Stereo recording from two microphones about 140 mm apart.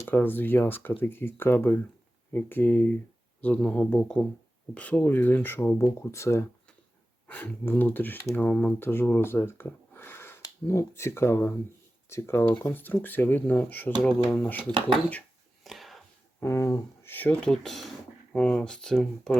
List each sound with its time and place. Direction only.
0.0 s speech: 15° left (ahead or behind)
14.7 s speech: 35° right (ahead or behind)
15.6 s a sound: centre (ahead or behind)
16.4 s speech: 20° left (ahead or behind); by 19.4 s 5° left (ahead or behind)